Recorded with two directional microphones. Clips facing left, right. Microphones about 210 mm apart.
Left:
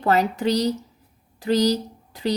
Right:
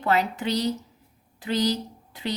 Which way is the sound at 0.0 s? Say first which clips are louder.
Left 4 dB; 40° left (ahead or behind).